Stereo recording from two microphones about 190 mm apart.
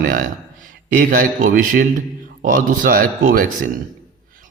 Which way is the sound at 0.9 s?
45° right (ahead or behind).